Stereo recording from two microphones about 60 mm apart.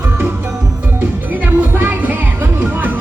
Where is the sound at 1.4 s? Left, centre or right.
Right.